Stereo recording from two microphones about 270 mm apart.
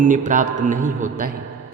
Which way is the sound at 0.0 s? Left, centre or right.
Right.